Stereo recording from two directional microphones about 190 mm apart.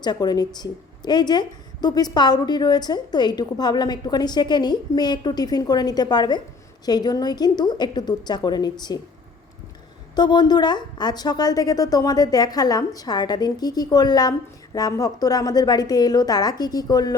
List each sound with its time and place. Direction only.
0.0 s a woman's voice: 20° left (ahead or behind)
10.2 s a woman's voice: 20° left (ahead or behind)